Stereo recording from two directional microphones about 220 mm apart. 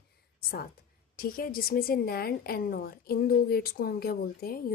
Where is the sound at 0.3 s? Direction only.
45° left (ahead or behind).